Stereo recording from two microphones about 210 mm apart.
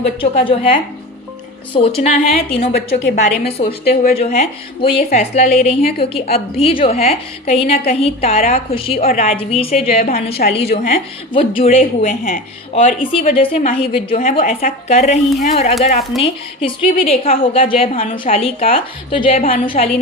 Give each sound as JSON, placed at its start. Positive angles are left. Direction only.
{"t": 0.0, "sound": "a woman's voice", "side_deg": 25}
{"t": 2.0, "sound": "speech", "side_deg": 30}
{"t": 3.0, "sound": "a woman's voice", "side_deg": 45}
{"t": 4.0, "sound": "a woman's voice", "side_deg": 30}